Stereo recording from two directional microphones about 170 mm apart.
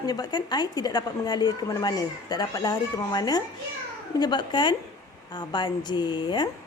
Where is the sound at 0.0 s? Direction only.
20° left (ahead or behind).